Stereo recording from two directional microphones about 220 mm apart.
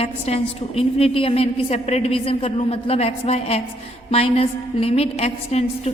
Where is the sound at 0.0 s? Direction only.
25° left (ahead or behind).